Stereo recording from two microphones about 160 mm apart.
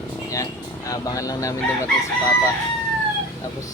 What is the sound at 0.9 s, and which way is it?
Speech, 20° left (ahead or behind).